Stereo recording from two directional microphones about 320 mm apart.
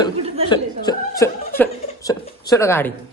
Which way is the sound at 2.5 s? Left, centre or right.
Centre.